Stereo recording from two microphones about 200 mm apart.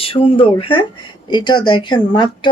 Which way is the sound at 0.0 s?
25° left (ahead or behind).